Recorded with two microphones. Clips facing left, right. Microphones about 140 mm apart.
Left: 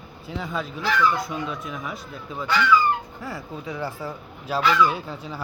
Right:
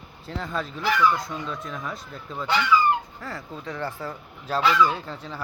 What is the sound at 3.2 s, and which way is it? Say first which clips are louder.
Speech: left 2 dB; 10° left (ahead or behind).